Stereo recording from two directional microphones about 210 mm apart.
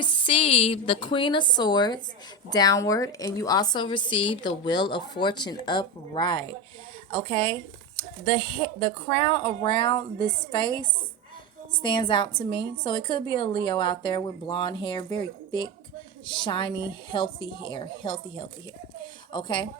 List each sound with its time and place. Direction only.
0.0 s a woman's voice: 25° left (ahead or behind)